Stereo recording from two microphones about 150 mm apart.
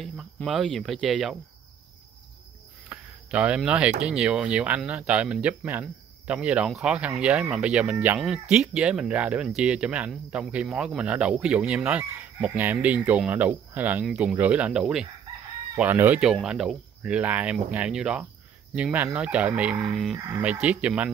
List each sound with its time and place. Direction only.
0.0 s speech: centre (ahead or behind)
2.9 s cricket: 10° right (ahead or behind)
4.0 s speech: 5° right (ahead or behind)
20.2 s speech: 20° right (ahead or behind)
20.6 s speech: 10° right (ahead or behind)